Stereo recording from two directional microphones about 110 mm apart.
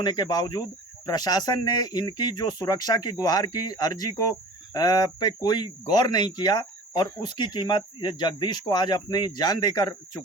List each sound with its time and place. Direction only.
0.0 s speech: 40° left (ahead or behind)